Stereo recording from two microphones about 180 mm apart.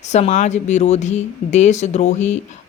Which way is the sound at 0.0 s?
40° left (ahead or behind).